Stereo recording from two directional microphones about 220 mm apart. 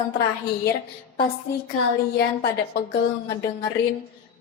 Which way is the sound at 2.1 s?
45° left (ahead or behind).